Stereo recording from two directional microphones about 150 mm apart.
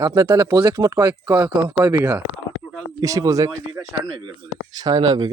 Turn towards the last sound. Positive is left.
turn(degrees=-30)  # may be behind; listen again after turning